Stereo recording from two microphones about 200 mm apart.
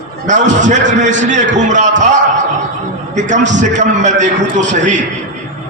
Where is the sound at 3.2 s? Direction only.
35° right (ahead or behind).